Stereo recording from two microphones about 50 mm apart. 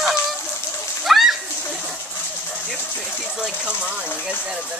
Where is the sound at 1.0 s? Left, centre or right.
Centre.